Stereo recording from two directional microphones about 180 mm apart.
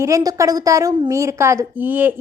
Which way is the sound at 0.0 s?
20° right (ahead or behind).